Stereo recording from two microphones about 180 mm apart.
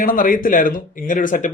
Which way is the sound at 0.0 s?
50° left (ahead or behind).